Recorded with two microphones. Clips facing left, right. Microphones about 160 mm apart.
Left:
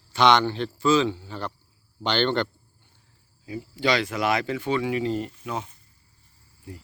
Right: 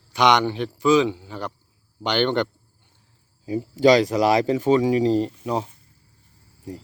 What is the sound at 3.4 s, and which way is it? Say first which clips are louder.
Speech: right 9 dB; 40° right (ahead or behind).